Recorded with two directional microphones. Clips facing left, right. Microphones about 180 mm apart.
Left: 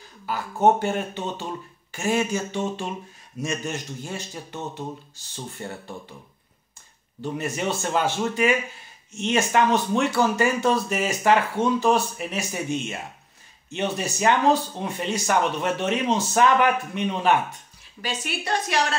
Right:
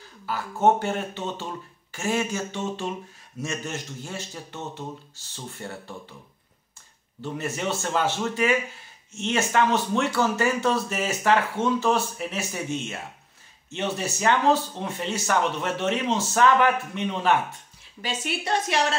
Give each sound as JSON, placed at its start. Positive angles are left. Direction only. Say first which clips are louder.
{"t": 0.3, "sound": "speech", "louder": "left 1 dB", "side_deg": 15}
{"t": 7.2, "sound": "speech", "louder": "left 2 dB", "side_deg": 15}
{"t": 18.0, "sound": "a woman's voice", "louder": "even", "side_deg": -25}